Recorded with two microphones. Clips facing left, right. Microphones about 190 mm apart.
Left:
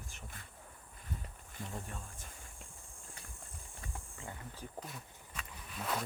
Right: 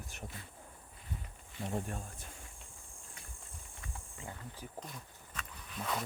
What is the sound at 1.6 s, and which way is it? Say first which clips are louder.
Speech: right 8 dB; 45° right (ahead or behind).